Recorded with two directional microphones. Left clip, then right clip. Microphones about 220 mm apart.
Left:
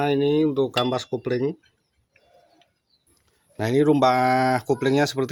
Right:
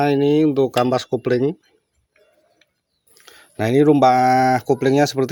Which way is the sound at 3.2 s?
25° right (ahead or behind).